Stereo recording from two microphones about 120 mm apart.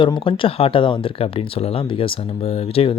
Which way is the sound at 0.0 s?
40° left (ahead or behind).